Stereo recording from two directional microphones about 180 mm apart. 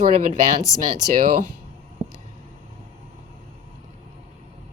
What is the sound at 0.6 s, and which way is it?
Speech, 20° left (ahead or behind).